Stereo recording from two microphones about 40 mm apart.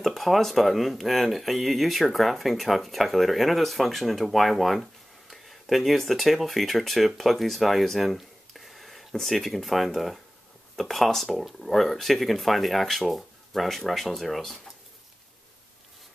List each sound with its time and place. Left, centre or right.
0.0 s speech: centre